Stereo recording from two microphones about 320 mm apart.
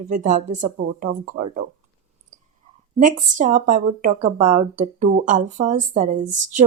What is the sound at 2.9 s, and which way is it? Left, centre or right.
Speech, right.